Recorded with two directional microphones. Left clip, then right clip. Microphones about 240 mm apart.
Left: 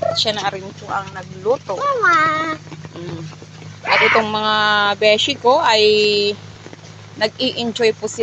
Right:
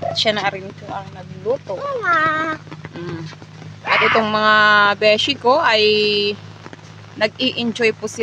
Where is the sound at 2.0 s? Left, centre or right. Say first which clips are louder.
Left 3 dB; centre.